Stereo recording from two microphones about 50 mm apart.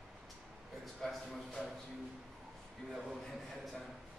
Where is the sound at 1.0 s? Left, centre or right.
Centre.